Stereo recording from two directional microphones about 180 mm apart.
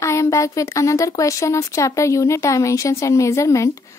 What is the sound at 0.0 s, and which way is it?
A woman's voice, 15° left (ahead or behind).